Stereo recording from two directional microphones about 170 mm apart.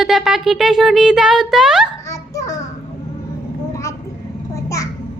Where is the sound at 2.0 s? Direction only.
20° left (ahead or behind).